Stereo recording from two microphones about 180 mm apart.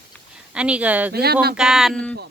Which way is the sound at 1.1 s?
60° right (ahead or behind).